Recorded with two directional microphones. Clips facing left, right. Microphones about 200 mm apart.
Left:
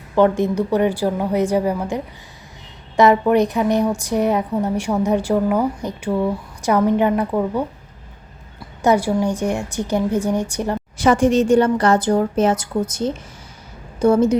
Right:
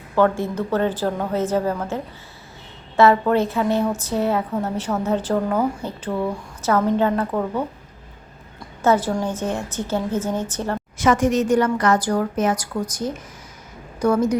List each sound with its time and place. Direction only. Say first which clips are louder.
0.2 s a woman's voice: left 3 dB; 20° left (ahead or behind)
8.8 s a woman's voice: left 2 dB; 15° left (ahead or behind)
10.9 s a woman's voice: left 3 dB; 30° left (ahead or behind)